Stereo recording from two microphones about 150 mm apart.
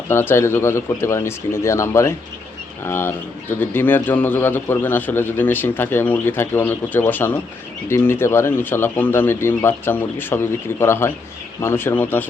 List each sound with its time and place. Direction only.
0.1 s a man's voice: 15° left (ahead or behind)